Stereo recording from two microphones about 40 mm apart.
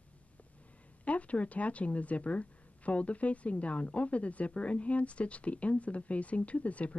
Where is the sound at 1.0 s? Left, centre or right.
Left.